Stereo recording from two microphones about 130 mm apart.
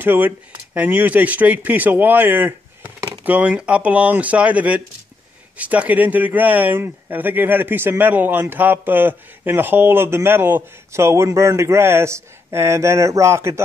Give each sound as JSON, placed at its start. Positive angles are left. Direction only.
{"t": 0.0, "sound": "speech", "side_deg": -15}